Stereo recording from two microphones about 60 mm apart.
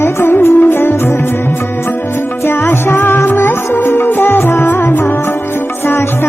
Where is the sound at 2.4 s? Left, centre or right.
Left.